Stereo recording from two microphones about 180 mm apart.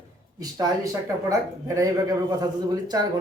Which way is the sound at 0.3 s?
20° right (ahead or behind).